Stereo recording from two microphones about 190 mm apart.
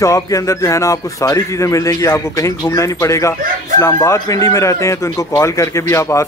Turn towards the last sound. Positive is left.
turn(degrees=15)  # may be behind; listen again after turning